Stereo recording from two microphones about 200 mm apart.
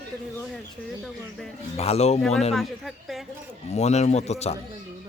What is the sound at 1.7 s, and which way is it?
Speech, 30° left (ahead or behind).